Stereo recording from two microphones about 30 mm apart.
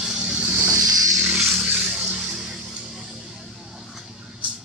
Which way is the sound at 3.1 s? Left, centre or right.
Right.